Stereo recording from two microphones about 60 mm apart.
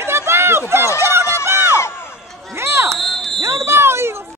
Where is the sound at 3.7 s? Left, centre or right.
Right.